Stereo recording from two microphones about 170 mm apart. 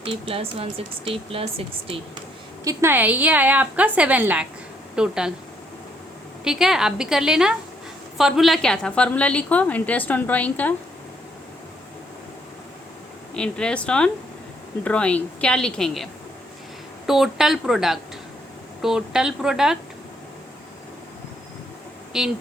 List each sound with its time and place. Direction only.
0.0 s speech: 35° right (ahead or behind)
2.6 s a woman's voice: 15° right (ahead or behind)
6.4 s a woman's voice: 5° right (ahead or behind)
13.3 s speech: 5° left (ahead or behind)
17.1 s speech: centre (ahead or behind)
22.1 s speech: centre (ahead or behind)